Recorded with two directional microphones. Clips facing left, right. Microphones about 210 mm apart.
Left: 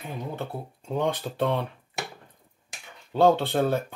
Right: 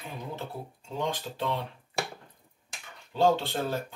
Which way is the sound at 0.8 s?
60° left (ahead or behind).